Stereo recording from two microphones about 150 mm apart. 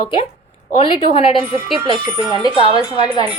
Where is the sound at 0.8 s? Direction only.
40° left (ahead or behind).